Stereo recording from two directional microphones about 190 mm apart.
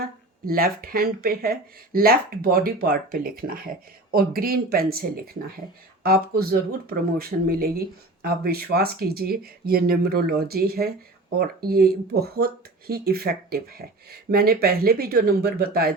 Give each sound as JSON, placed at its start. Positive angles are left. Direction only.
{"t": 0.0, "sound": "speech", "side_deg": -50}